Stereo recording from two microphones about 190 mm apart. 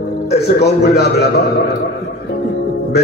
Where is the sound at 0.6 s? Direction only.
60° left (ahead or behind).